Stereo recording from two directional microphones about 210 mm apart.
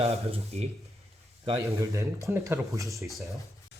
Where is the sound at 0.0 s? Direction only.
30° right (ahead or behind).